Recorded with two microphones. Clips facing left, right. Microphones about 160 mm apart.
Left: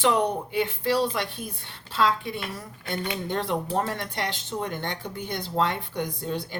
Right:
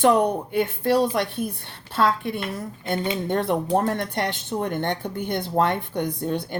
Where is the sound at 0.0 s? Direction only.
50° right (ahead or behind).